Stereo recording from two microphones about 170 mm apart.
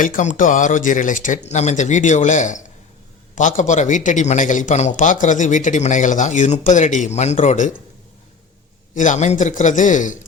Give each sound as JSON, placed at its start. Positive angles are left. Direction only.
{"t": 0.0, "sound": "a man's voice", "side_deg": 50}
{"t": 9.0, "sound": "a man's voice", "side_deg": 45}